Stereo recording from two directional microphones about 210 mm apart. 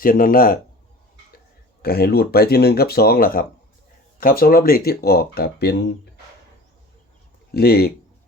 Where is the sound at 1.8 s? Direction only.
50° left (ahead or behind).